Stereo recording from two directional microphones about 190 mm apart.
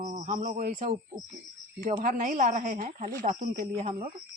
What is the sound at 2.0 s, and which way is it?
A woman's voice, 40° right (ahead or behind).